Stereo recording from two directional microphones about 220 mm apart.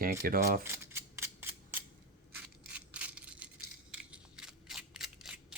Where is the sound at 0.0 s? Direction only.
40° right (ahead or behind).